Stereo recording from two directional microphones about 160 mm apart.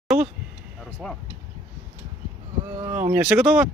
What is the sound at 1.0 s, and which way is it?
Speech, 5° left (ahead or behind).